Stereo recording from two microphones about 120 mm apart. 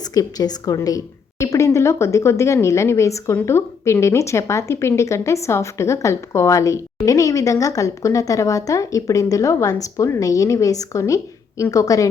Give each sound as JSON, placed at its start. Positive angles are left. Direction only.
{"t": 0.0, "sound": "a woman's voice", "side_deg": 30}